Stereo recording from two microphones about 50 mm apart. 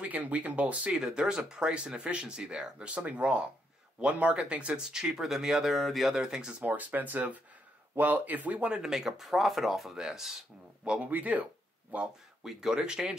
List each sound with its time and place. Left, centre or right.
0.0 s speech: right
0.9 s speech: centre
2.9 s speech: right; by 6.1 s centre
6.1 s speech: centre
6.6 s speech: right; by 10.4 s centre
10.8 s a man's voice: right
11.1 s speech: right
12.4 s speech: centre